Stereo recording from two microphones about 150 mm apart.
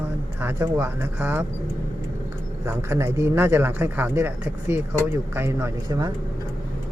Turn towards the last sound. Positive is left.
turn(degrees=-25)  # may be behind; listen again after turning